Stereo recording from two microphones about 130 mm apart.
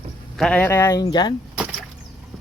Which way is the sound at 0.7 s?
25° left (ahead or behind).